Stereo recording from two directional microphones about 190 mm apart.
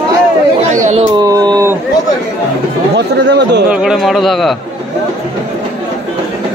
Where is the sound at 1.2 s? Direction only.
20° right (ahead or behind).